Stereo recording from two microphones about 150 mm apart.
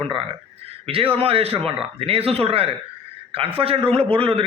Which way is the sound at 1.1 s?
40° right (ahead or behind).